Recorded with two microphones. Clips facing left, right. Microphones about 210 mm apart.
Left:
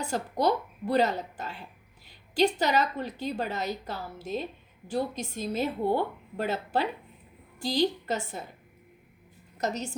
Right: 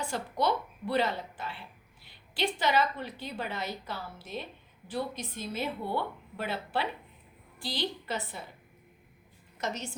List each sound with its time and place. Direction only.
0.0 s a woman's voice: 40° left (ahead or behind)
9.6 s a woman's voice: 40° left (ahead or behind)